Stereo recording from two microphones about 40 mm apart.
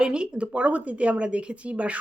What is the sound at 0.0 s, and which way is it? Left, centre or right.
A woman's voice, right.